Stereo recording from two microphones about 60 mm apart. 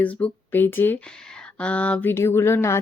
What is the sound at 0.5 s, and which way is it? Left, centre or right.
Speech, left.